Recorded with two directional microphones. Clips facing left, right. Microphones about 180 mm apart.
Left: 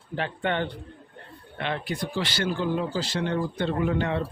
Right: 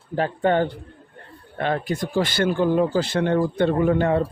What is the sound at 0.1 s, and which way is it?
Speech, 40° right (ahead or behind).